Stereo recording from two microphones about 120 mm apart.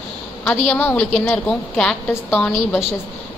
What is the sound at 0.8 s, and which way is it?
A woman's voice, 20° left (ahead or behind).